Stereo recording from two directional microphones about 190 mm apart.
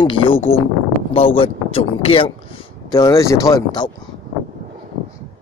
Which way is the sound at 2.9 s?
20° left (ahead or behind).